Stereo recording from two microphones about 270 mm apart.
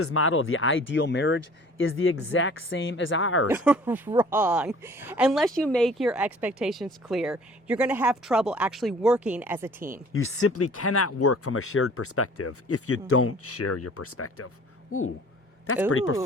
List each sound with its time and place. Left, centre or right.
0.0 s speech: left
3.4 s a woman's voice: centre
10.1 s speech: left
15.9 s speech: left